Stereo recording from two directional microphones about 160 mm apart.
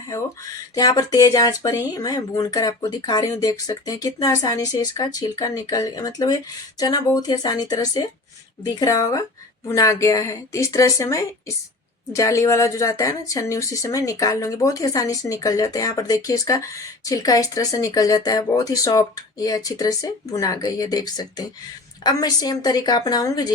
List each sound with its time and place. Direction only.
0.8 s speech: 25° left (ahead or behind)